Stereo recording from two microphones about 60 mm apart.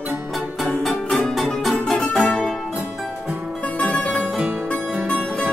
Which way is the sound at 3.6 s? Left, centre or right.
Left.